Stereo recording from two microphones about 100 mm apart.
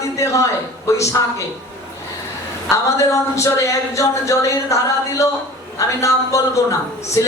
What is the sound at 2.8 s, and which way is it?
A man's voice, 30° left (ahead or behind).